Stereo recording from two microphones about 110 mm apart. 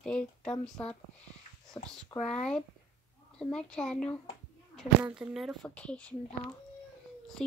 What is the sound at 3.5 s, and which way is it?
Speech, 5° left (ahead or behind).